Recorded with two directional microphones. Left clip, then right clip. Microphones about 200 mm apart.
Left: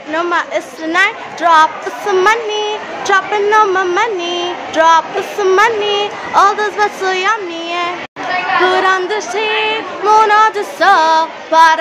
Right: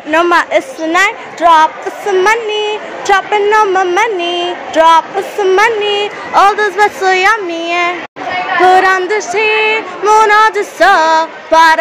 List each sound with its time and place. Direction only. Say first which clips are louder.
0.1 s female singing: right 6 dB; 30° right (ahead or behind)
0.8 s a woman's voice: left 2 dB; 15° right (ahead or behind)
8.6 s female singing: right 8 dB; 15° right (ahead or behind)